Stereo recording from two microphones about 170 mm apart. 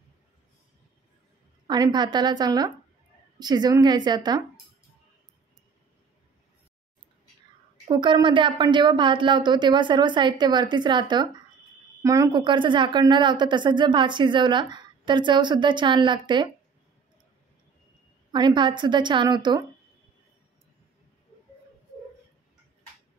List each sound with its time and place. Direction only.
1.7 s a woman's voice: 25° right (ahead or behind)
7.9 s a woman's voice: 25° right (ahead or behind)
18.3 s a woman's voice: 25° right (ahead or behind)